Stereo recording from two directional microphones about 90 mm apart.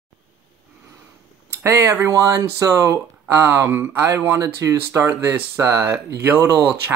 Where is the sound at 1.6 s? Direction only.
35° right (ahead or behind).